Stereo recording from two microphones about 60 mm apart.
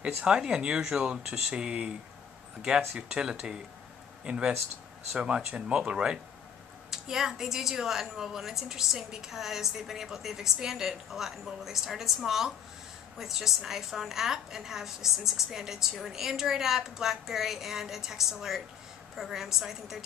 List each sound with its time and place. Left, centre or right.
0.0 s a woman's voice: centre
1.2 s speech: right
1.6 s a woman's voice: centre
2.9 s a woman's voice: centre